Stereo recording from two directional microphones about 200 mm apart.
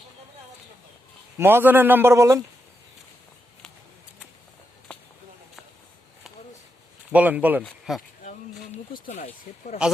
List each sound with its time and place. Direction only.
1.4 s a man's voice: 10° right (ahead or behind)
7.1 s a man's voice: 5° right (ahead or behind)
8.9 s speech: 35° left (ahead or behind)